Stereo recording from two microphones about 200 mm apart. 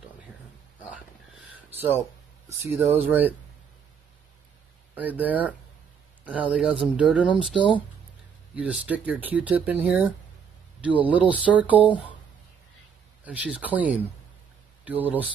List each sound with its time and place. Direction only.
0.8 s a sound: 5° right (ahead or behind)
4.9 s speech: 10° right (ahead or behind)
13.2 s speech: 5° right (ahead or behind)